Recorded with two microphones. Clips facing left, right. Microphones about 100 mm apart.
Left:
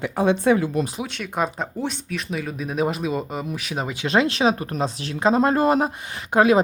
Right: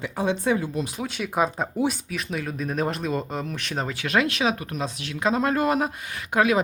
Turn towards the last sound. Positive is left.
turn(degrees=30)  # may be behind; listen again after turning